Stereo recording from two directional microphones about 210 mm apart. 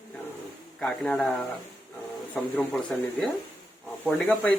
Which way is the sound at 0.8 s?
Centre (ahead or behind).